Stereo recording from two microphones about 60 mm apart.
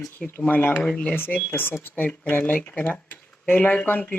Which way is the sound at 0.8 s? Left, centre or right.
Centre.